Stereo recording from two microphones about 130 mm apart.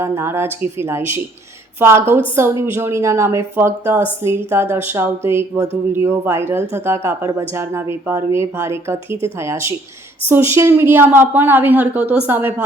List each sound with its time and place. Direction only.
0.0 s a woman's voice: 20° right (ahead or behind)